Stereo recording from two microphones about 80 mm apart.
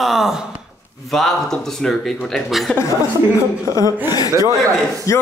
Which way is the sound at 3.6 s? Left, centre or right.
Left.